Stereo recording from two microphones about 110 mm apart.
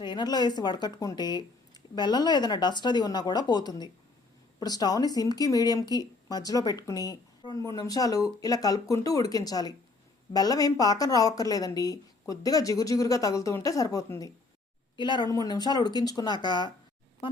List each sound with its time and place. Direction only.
0.0 s speech: 45° left (ahead or behind)
14.9 s speech: 45° left (ahead or behind)